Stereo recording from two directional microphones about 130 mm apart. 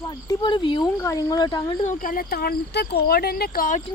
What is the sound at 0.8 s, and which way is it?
Speech, 25° left (ahead or behind).